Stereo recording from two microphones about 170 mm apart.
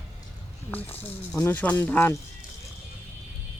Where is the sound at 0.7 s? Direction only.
10° left (ahead or behind).